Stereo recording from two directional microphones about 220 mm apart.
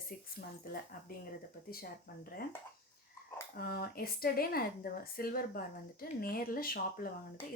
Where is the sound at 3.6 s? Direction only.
45° left (ahead or behind).